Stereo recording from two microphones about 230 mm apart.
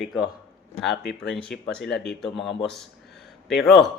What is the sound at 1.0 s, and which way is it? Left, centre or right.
Speech, left.